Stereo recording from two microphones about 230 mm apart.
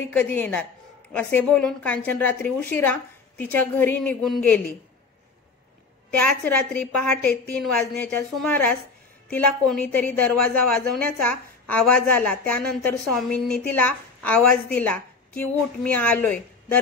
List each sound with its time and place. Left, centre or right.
0.1 s a woman's voice: centre
6.1 s a woman's voice: centre